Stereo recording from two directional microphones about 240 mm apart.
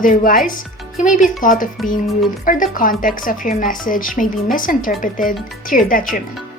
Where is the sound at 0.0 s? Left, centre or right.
Left.